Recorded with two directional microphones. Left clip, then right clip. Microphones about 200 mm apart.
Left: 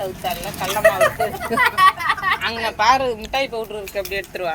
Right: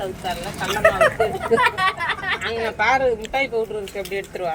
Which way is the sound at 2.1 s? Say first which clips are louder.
Left 4 dB; 55° left (ahead or behind).